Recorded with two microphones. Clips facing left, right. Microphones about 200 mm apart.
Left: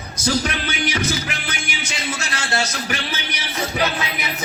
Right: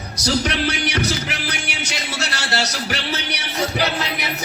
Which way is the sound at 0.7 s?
70° right (ahead or behind).